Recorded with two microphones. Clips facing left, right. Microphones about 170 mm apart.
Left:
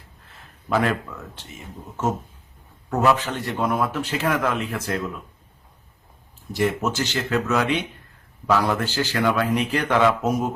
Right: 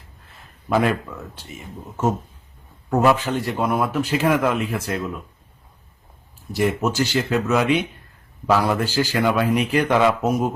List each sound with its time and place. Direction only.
0.7 s a man's voice: 10° right (ahead or behind)
3.0 s a man's voice: 10° right (ahead or behind)
6.5 s a man's voice: 10° right (ahead or behind)